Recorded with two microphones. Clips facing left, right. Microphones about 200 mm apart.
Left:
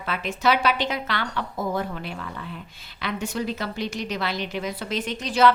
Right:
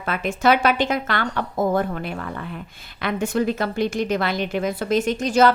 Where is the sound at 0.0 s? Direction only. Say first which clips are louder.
Right 4 dB; 50° right (ahead or behind).